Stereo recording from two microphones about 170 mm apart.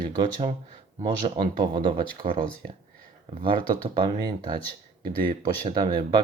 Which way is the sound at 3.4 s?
25° right (ahead or behind).